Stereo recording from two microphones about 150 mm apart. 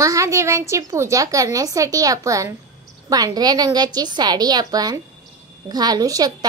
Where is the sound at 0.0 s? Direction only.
20° right (ahead or behind).